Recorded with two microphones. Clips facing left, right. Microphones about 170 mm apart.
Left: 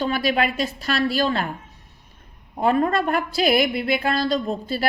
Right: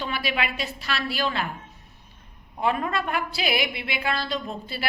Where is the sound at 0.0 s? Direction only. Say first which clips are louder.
Left 7 dB; 45° left (ahead or behind).